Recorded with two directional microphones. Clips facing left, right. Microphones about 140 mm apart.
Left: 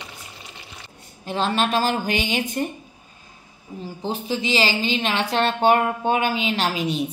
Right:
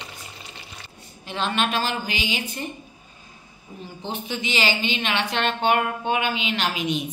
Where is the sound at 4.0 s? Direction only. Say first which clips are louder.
Left 4 dB; 35° left (ahead or behind).